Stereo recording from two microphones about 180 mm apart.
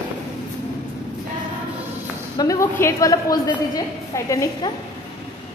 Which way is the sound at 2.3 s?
15° left (ahead or behind).